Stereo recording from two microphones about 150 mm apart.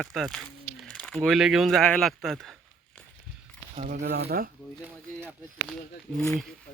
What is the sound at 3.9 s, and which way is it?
Speech, 80° right.